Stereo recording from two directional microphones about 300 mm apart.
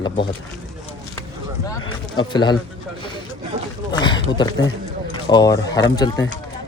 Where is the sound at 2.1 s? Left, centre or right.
Centre.